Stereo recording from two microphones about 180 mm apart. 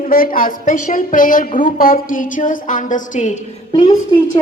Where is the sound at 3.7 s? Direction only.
25° left (ahead or behind).